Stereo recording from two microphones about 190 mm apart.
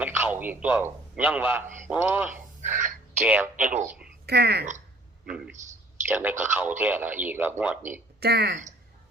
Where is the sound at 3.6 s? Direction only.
45° right (ahead or behind).